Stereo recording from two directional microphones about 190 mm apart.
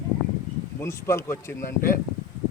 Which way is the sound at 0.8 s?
15° left (ahead or behind).